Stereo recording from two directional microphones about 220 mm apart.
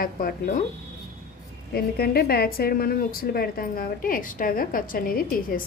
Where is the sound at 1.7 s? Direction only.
45° left (ahead or behind).